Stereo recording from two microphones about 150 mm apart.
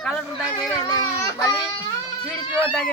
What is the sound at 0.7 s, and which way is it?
Speech, 20° left (ahead or behind).